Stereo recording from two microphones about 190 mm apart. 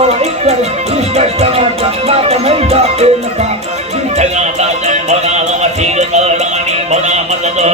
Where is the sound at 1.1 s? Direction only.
35° right (ahead or behind).